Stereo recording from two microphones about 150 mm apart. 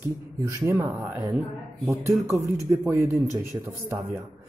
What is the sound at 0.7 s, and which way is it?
Speech, 20° right (ahead or behind).